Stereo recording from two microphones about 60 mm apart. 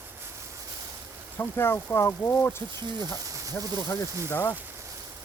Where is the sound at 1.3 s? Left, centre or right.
Left.